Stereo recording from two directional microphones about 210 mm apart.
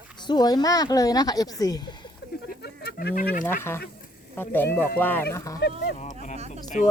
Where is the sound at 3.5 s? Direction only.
10° left (ahead or behind).